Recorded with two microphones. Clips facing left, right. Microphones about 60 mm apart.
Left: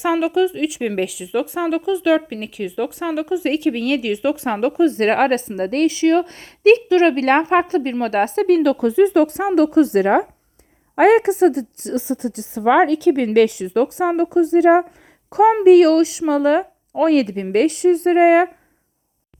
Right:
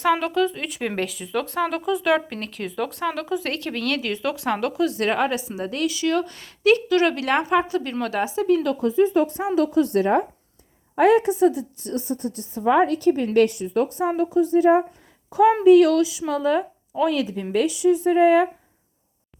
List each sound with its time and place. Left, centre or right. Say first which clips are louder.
0.0 s speech: left 3 dB; centre
4.9 s speech: left 6 dB; left
9.6 s a woman's voice: left 5 dB; left
14.2 s speech: left 4 dB; left
15.6 s speech: left 4 dB; left